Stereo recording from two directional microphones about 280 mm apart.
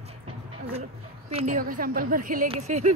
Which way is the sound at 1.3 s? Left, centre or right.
Right.